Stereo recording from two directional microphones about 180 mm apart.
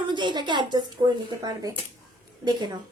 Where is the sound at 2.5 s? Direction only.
25° right (ahead or behind).